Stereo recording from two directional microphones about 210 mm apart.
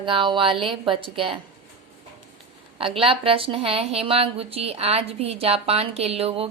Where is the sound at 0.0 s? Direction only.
25° right (ahead or behind).